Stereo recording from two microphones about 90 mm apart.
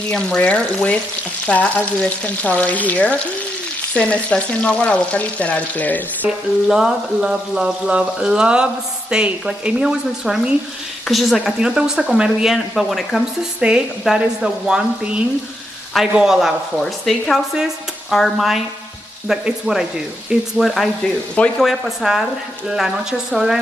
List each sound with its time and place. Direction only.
0.1 s frying: 10° left (ahead or behind)
6.7 s speech: 5° right (ahead or behind)
13.6 s speech: 10° right (ahead or behind)